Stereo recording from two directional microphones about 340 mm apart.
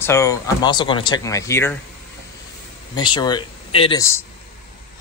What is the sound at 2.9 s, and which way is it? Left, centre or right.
Speech, centre.